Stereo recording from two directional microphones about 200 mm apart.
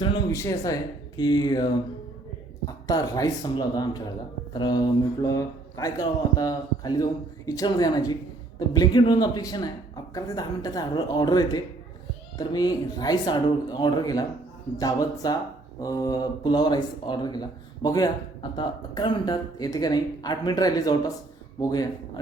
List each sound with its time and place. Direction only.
0.0 s a man's voice: 20° left (ahead or behind)